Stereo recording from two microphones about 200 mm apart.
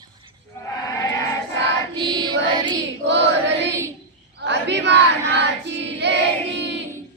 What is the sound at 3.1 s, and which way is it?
Choir, 60° right (ahead or behind).